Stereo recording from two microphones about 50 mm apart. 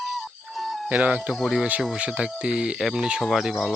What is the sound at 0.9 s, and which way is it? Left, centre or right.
Speech, right.